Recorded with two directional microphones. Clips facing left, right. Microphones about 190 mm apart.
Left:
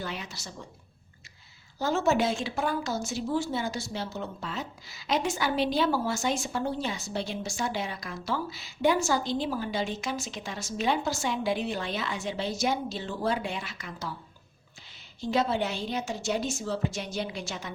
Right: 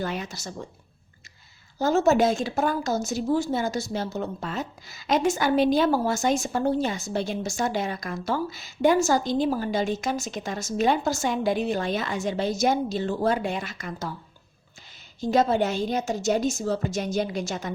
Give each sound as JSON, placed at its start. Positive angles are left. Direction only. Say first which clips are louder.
{"t": 0.0, "sound": "a woman's voice", "louder": "right 6 dB", "side_deg": -45}
{"t": 1.8, "sound": "a woman's voice", "louder": "right 5 dB", "side_deg": -40}
{"t": 15.2, "sound": "a woman's voice", "louder": "right 5 dB", "side_deg": -45}